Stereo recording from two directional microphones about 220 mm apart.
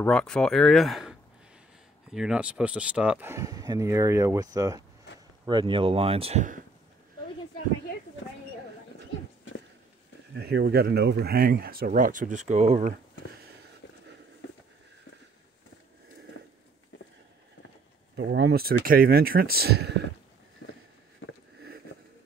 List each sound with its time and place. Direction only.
0.0 s speech: 5° left (ahead or behind); by 6.6 s 35° right (ahead or behind)
10.3 s speech: 45° right (ahead or behind); by 12.9 s 30° right (ahead or behind)
18.1 s speech: 50° right (ahead or behind)
20.6 s a sound: 55° left (ahead or behind)